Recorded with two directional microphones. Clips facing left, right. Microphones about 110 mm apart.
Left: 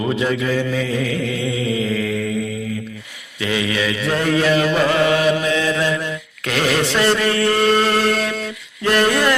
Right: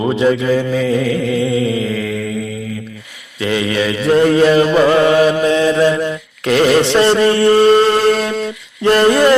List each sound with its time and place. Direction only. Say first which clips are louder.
0.0 s mantra: right 6 dB; 30° right (ahead or behind)
3.4 s mantra: right 4 dB; 40° right (ahead or behind)